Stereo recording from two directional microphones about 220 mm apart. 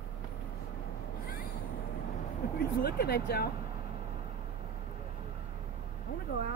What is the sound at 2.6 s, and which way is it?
Speech, 45° left (ahead or behind).